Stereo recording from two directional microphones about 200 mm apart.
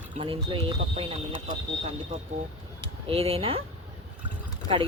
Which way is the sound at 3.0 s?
30° right (ahead or behind).